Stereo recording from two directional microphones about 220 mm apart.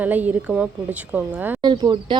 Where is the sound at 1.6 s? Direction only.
20° right (ahead or behind).